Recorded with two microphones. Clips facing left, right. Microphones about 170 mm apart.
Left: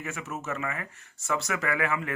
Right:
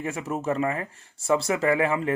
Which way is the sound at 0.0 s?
30° right (ahead or behind).